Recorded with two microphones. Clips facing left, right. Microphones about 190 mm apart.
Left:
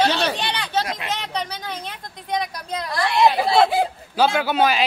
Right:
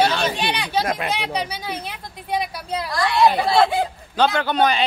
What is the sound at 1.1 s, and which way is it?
Speech, 10° right (ahead or behind).